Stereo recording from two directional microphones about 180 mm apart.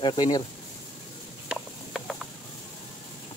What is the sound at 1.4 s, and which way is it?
Mechanisms, centre (ahead or behind).